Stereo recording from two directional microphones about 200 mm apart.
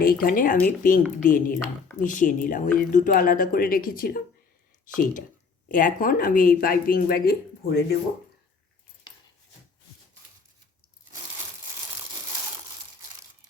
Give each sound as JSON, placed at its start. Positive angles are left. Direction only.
{"t": 0.0, "sound": "speech", "side_deg": 45}
{"t": 5.6, "sound": "speech", "side_deg": 40}